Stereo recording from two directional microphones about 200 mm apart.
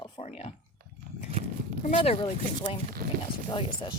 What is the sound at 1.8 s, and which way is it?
Speech, 30° left (ahead or behind).